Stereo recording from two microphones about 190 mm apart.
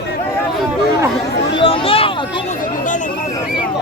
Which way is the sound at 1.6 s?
30° left (ahead or behind).